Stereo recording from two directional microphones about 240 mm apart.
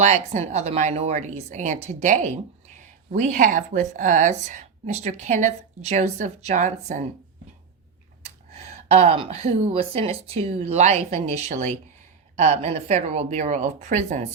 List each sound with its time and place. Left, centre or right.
0.0 s speech: right
8.2 s speech: right